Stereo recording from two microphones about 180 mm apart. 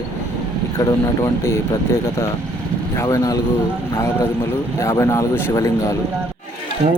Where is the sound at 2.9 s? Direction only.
15° left (ahead or behind).